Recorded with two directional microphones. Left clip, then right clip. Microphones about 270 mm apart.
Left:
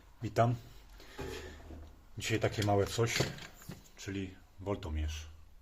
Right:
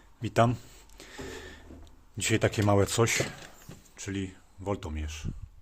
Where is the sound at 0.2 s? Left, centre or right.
Right.